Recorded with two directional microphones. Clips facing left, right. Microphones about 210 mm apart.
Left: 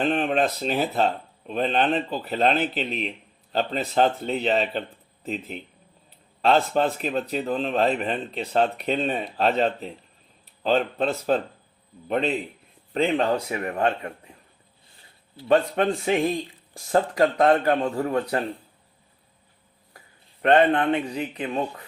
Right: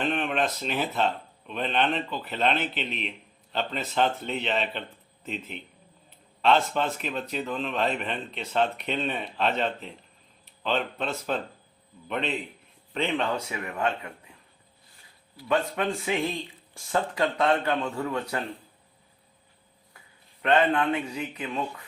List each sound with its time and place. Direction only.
0.0 s speech: 35° left (ahead or behind)
14.3 s a sound: 40° left (ahead or behind)
15.4 s speech: 35° left (ahead or behind)
20.5 s speech: 35° left (ahead or behind)